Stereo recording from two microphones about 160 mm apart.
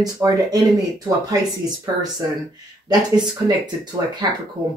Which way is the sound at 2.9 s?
25° right (ahead or behind).